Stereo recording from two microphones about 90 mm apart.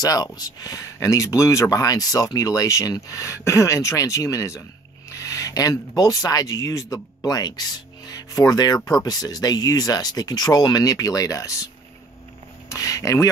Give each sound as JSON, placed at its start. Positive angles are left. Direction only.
{"t": 0.0, "sound": "speech", "side_deg": 45}
{"t": 12.6, "sound": "speech", "side_deg": 40}